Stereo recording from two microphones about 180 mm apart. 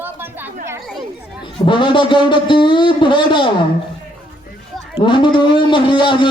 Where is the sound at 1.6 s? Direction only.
25° left (ahead or behind).